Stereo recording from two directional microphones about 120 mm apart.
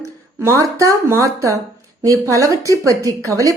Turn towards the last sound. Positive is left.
turn(degrees=-25)  # may be behind; listen again after turning